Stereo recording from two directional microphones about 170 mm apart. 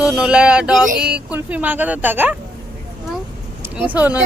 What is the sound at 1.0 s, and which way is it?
Speech, 5° right (ahead or behind).